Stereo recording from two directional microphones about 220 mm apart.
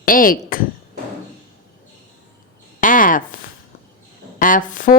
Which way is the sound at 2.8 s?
40° left (ahead or behind).